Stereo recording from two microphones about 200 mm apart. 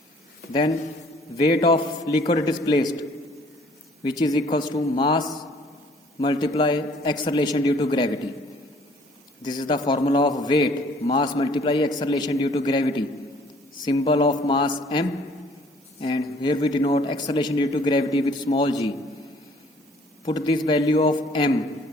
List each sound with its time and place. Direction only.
1.6 s a man's voice: 20° left (ahead or behind)
4.0 s a man's voice: 20° left (ahead or behind)
9.4 s a man's voice: 20° left (ahead or behind)
20.2 s a man's voice: 25° left (ahead or behind)